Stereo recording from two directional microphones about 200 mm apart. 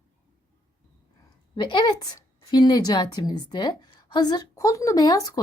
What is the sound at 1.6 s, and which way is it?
A woman's voice, 25° left (ahead or behind).